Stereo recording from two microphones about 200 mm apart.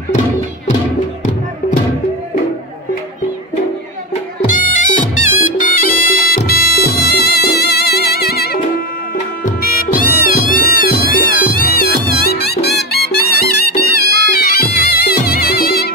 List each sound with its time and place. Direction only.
4.1 s music: 40° left (ahead or behind)
14.0 s music: 55° right (ahead or behind)
14.3 s music: 50° left (ahead or behind)